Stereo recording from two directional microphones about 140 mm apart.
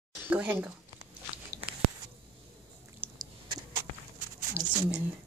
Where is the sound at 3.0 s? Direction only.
15° right (ahead or behind).